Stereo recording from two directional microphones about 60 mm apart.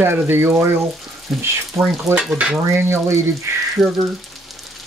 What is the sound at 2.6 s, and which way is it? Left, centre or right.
Speech, right.